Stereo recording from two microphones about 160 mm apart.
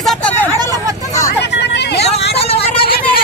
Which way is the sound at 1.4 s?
90° left.